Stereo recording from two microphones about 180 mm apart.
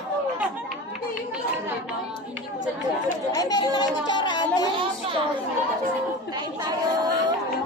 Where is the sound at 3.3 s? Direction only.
20° left (ahead or behind).